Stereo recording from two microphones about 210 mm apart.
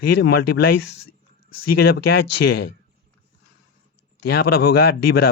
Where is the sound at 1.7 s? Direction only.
50° left (ahead or behind).